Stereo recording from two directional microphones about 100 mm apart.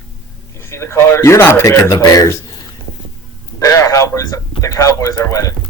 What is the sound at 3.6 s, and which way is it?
A man's voice, 30° left (ahead or behind).